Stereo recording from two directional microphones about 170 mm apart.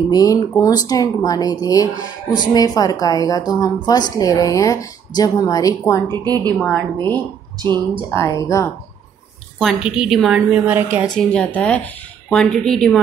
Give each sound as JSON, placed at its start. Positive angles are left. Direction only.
{"t": 0.1, "sound": "a woman's voice", "side_deg": 20}
{"t": 6.0, "sound": "a woman's voice", "side_deg": -25}
{"t": 6.6, "sound": "speech", "side_deg": 10}
{"t": 9.6, "sound": "a woman's voice", "side_deg": 0}
{"t": 11.1, "sound": "a woman's voice", "side_deg": 5}